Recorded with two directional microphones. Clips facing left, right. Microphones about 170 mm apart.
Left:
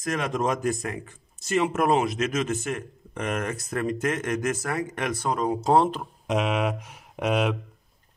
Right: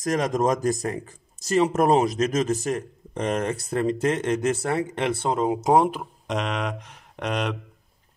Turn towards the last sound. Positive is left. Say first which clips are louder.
# left 3 dB
turn(degrees=5)  # may be behind; listen again after turning